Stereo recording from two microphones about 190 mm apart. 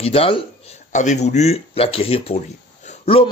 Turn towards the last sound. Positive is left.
turn(degrees=30)  # may be behind; listen again after turning